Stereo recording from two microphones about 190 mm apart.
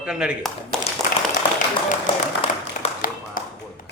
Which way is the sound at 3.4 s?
45° left (ahead or behind).